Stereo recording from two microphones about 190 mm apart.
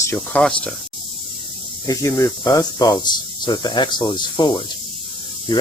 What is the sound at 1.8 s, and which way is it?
Speech, 15° left (ahead or behind).